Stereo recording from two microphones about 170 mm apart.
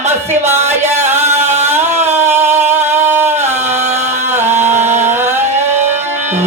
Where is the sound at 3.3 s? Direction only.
40° right (ahead or behind).